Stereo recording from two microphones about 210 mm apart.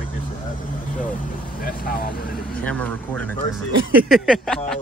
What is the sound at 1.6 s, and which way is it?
Speech, 45° left (ahead or behind).